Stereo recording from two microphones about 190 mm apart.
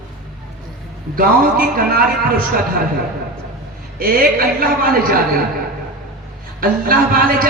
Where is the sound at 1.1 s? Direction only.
50° right (ahead or behind).